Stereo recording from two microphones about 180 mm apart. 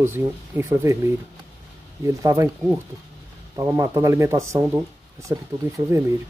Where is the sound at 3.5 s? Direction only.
20° right (ahead or behind).